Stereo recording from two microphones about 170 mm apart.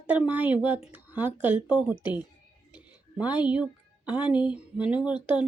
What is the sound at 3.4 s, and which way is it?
Speech, 5° right (ahead or behind).